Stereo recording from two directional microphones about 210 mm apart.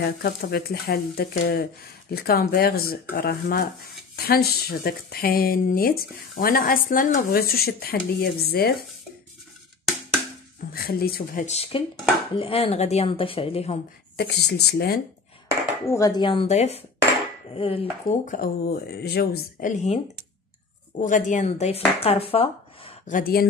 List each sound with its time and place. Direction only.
0.0 s speech: 50° left (ahead or behind)
10.7 s speech: 45° left (ahead or behind); by 13.7 s 30° left (ahead or behind)
14.1 s speech: 50° left (ahead or behind)
15.9 s speech: 15° left (ahead or behind)
18.3 s speech: 45° left (ahead or behind)
19.7 s speech: 35° left (ahead or behind)
21.0 s speech: 35° left (ahead or behind)